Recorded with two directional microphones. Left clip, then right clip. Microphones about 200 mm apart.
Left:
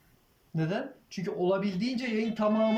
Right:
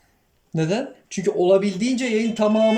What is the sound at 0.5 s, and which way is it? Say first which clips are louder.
Speech: right 9 dB; 15° right (ahead or behind).